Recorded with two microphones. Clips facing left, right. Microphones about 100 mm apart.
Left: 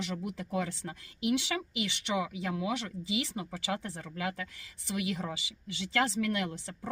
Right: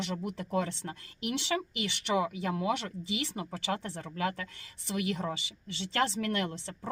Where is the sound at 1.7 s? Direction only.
45° right (ahead or behind).